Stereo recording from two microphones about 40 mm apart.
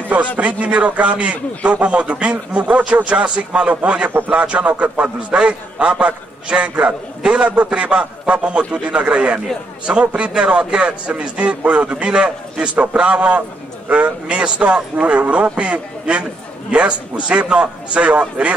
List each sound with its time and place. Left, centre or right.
0.4 s a man's voice: right
5.3 s a man's voice: right
14.2 s a man's voice: right